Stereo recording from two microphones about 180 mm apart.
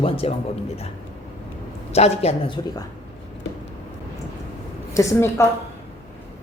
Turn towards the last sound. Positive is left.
turn(degrees=15)  # may be behind; listen again after turning